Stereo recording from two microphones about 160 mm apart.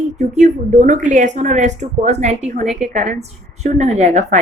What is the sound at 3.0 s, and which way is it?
A woman's voice, 45° right (ahead or behind).